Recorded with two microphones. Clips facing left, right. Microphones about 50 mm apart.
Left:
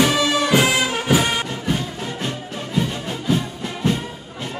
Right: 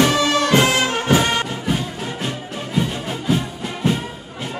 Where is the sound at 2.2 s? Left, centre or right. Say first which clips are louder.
Right 1 dB; centre.